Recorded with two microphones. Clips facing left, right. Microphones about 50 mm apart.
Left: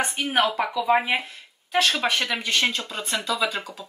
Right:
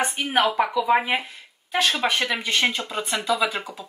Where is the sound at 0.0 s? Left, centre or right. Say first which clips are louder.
Right 1 dB; centre.